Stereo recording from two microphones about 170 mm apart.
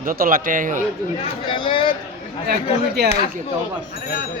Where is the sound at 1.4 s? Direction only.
30° left (ahead or behind).